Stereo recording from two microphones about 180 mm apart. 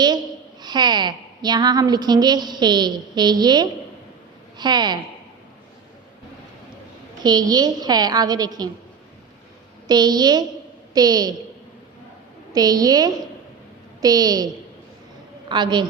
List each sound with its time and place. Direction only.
0.6 s a woman's voice: 25° right (ahead or behind)
7.2 s a woman's voice: 20° right (ahead or behind)
9.8 s a woman's voice: 20° right (ahead or behind)
12.5 s a woman's voice: 20° right (ahead or behind)